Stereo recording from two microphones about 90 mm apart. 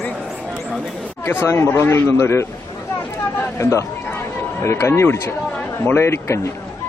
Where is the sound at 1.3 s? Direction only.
25° left (ahead or behind).